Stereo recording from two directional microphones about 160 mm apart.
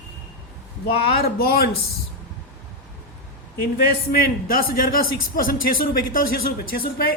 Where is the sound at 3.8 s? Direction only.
65° left (ahead or behind).